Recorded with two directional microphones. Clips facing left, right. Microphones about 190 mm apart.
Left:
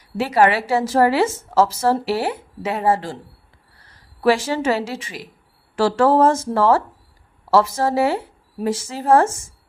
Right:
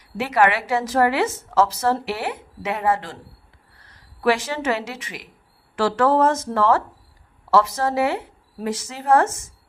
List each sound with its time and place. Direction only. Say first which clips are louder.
0.2 s a woman's voice: left 3 dB; 30° left (ahead or behind)
4.2 s a woman's voice: left 3 dB; 30° left (ahead or behind)